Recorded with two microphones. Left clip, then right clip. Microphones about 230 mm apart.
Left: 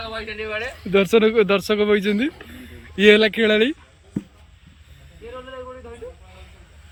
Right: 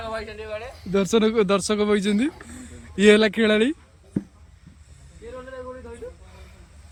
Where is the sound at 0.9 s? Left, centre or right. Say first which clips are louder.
Left 4 dB; centre.